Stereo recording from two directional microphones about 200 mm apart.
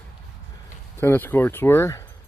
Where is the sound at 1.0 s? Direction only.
10° left (ahead or behind).